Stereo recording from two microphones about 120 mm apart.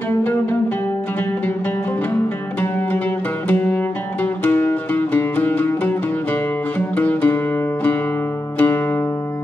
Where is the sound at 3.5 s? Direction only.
10° left (ahead or behind).